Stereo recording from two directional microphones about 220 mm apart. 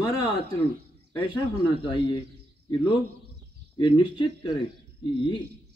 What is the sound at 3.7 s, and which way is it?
Speech, 20° left (ahead or behind).